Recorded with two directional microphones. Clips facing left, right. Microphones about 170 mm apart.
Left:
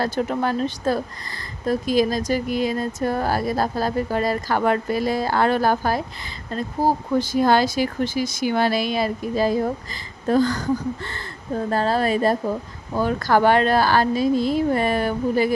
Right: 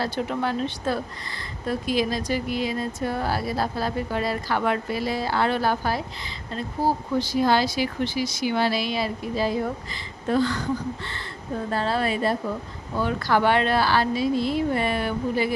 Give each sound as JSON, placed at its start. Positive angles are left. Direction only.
{"t": 0.0, "sound": "a woman's voice", "side_deg": 45}